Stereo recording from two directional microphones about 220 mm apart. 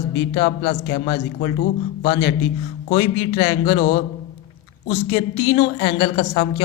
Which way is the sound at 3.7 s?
45° left (ahead or behind).